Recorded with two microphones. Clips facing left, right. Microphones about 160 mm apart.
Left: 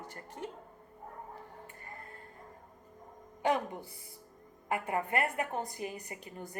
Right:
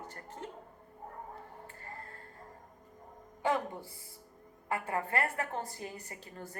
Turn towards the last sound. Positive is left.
turn(degrees=15)  # may be behind; listen again after turning